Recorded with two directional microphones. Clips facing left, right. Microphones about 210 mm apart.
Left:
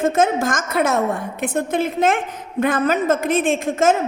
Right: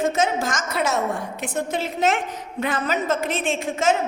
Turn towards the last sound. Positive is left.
turn(degrees=50)  # may be behind; listen again after turning